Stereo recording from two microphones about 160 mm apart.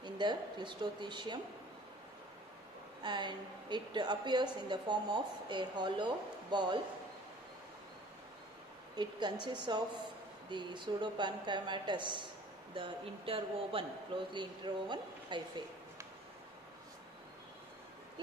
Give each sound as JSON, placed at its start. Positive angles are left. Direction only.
{"t": 0.0, "sound": "a woman's voice", "side_deg": -30}
{"t": 3.0, "sound": "a woman's voice", "side_deg": -25}
{"t": 9.5, "sound": "a woman's voice", "side_deg": -25}